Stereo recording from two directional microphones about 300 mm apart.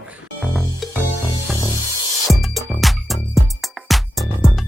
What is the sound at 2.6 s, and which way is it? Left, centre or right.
Music, centre.